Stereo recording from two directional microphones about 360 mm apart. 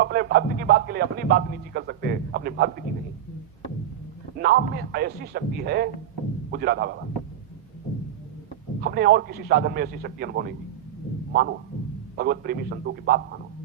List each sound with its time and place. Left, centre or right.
0.0 s speech: right
4.4 s a man's voice: right
8.8 s a man's voice: right